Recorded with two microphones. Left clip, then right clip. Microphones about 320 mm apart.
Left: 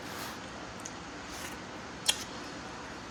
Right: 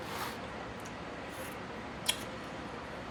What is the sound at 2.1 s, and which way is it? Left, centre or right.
Scissors, left.